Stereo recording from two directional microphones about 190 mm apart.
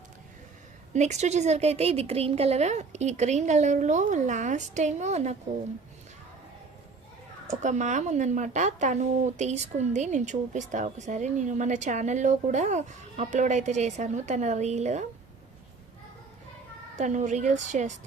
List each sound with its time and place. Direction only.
0.9 s speech: 35° right (ahead or behind)
7.6 s speech: 40° right (ahead or behind)
17.0 s speech: 40° right (ahead or behind)